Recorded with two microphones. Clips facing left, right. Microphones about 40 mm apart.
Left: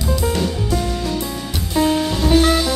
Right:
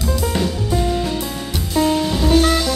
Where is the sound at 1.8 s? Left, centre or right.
Centre.